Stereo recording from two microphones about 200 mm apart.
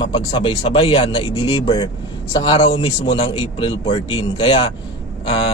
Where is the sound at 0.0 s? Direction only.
25° left (ahead or behind).